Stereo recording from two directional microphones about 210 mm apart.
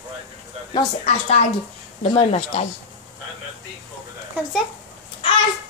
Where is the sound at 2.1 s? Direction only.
30° left (ahead or behind).